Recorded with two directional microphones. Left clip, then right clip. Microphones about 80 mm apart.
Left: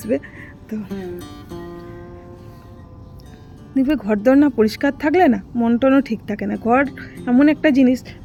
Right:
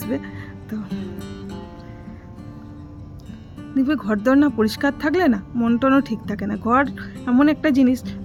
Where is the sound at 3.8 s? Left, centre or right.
Left.